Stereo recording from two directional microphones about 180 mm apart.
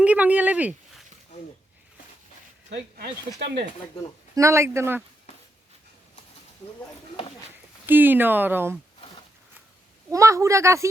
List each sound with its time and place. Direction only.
0.0 s speech: 10° right (ahead or behind)
4.4 s speech: 15° right (ahead or behind)
7.9 s speech: 10° right (ahead or behind)
10.1 s speech: 15° right (ahead or behind)